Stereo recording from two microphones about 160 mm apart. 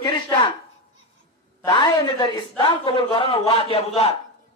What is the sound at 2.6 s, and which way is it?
Speech, 30° left (ahead or behind).